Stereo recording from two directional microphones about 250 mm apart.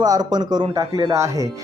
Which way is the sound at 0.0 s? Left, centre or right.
Centre.